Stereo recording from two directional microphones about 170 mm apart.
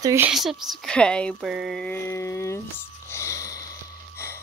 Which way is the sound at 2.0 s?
15° left (ahead or behind).